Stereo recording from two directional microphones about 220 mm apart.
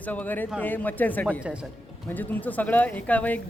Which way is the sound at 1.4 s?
5° right (ahead or behind).